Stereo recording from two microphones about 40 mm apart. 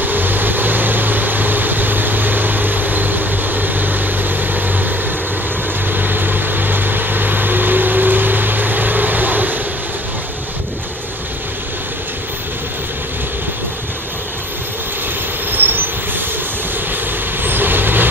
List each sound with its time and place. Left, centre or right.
0.0 s vehicle: right
15.5 s vehicle: right